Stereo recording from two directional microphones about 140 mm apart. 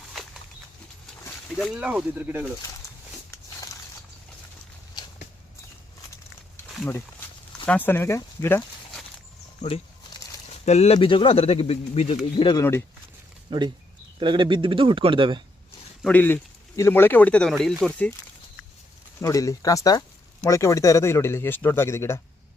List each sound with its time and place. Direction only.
1.5 s speech: 5° right (ahead or behind)
2.8 s a sound: 20° left (ahead or behind)
5.0 s walk: 30° left (ahead or behind)
7.6 s speech: 10° left (ahead or behind)
9.6 s speech: 45° left (ahead or behind)
13.5 s speech: 35° right (ahead or behind)
16.0 s speech: 15° left (ahead or behind)
19.2 s speech: 25° left (ahead or behind)